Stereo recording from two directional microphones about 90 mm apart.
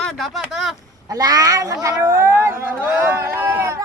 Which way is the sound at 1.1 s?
45° right (ahead or behind).